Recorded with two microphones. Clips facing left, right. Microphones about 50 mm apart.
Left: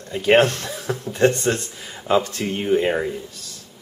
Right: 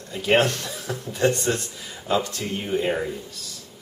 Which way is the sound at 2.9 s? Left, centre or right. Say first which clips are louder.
Left 3 dB; centre.